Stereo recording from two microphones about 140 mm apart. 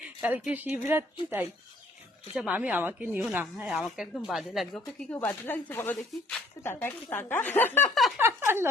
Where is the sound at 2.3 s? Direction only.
10° right (ahead or behind); by 7.9 s 15° left (ahead or behind).